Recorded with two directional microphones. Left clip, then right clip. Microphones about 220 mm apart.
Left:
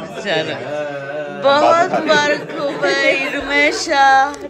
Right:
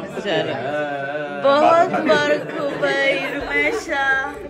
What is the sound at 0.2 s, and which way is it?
A man's voice, 5° right (ahead or behind).